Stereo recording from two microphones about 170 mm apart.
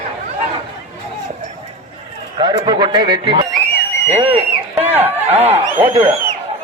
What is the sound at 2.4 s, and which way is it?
Speech, 25° right (ahead or behind).